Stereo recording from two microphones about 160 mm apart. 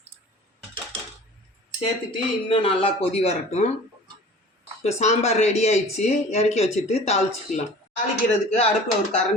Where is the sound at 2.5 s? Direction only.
35° left (ahead or behind).